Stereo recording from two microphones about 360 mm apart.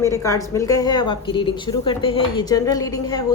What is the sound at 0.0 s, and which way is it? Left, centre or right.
A woman's voice, centre.